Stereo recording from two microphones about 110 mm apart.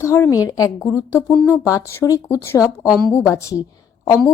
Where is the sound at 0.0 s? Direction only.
25° left (ahead or behind).